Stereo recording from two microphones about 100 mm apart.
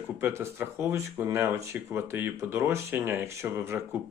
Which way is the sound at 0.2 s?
25° right (ahead or behind).